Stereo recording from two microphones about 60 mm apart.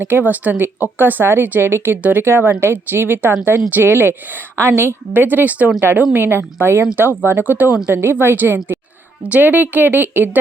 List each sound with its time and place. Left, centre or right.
0.0 s speech: right
2.0 s speech: right
6.1 s speech: right